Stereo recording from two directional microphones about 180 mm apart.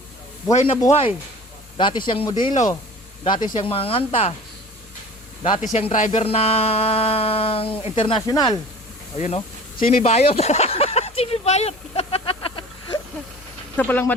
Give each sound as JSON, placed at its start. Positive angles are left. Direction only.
{"t": 0.5, "sound": "speech", "side_deg": 35}
{"t": 5.4, "sound": "speech", "side_deg": 35}
{"t": 9.1, "sound": "speech", "side_deg": 35}
{"t": 9.9, "sound": "a sound", "side_deg": 35}
{"t": 13.7, "sound": "speech", "side_deg": 10}